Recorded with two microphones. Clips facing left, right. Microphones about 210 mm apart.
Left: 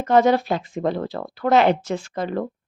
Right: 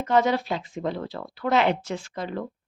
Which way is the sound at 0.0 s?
45° left (ahead or behind).